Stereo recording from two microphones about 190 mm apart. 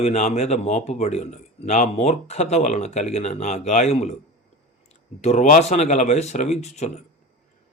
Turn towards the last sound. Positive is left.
turn(degrees=35)  # may be behind; listen again after turning